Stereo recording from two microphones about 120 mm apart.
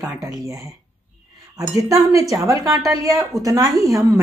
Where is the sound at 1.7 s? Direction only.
25° right (ahead or behind).